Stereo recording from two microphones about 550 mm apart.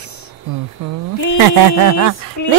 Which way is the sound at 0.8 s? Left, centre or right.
Right.